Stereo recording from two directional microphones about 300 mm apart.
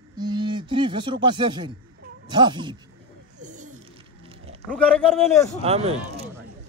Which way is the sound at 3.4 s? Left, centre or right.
Right.